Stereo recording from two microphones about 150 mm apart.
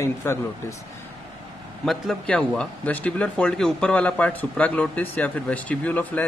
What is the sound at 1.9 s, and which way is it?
Speech, 5° left (ahead or behind).